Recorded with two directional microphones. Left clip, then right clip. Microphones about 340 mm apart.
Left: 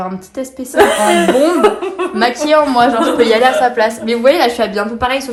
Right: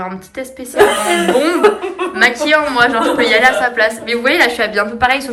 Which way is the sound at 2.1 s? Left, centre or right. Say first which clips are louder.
Even; centre.